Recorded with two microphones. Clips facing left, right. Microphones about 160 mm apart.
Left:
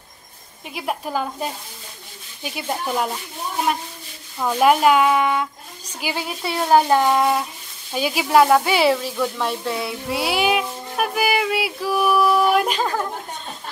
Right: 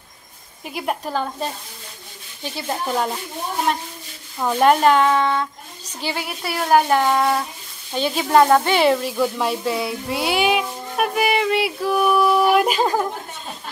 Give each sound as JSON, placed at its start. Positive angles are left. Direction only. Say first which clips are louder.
{"t": 0.7, "sound": "speech", "louder": "right 1 dB", "side_deg": 0}
{"t": 2.4, "sound": "child singing", "louder": "even", "side_deg": 10}
{"t": 4.4, "sound": "speech", "louder": "right 1 dB", "side_deg": -5}
{"t": 4.6, "sound": "a woman's voice", "louder": "even", "side_deg": 5}
{"t": 6.6, "sound": "child singing", "louder": "left 1 dB", "side_deg": 15}
{"t": 7.9, "sound": "speech", "louder": "even", "side_deg": 10}
{"t": 12.8, "sound": "a woman's voice", "louder": "right 4 dB", "side_deg": -15}